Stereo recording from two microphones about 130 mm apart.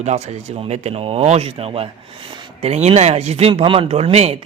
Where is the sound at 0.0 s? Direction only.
60° right (ahead or behind).